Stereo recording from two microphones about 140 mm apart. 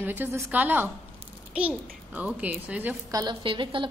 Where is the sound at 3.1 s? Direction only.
35° right (ahead or behind).